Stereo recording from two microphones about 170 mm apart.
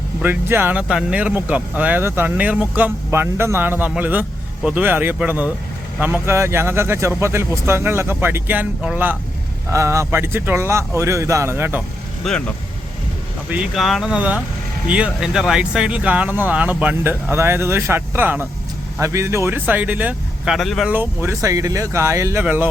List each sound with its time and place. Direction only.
0.2 s speech: 10° right (ahead or behind)
13.5 s speech: 5° right (ahead or behind)
20.9 s speech: 15° right (ahead or behind)